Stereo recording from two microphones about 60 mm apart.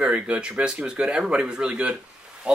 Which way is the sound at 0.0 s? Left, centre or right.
Centre.